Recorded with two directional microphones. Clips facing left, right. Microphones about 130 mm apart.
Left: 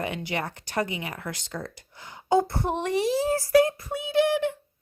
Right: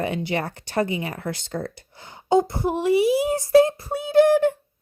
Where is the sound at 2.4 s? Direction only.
15° right (ahead or behind); by 4.5 s 45° right (ahead or behind).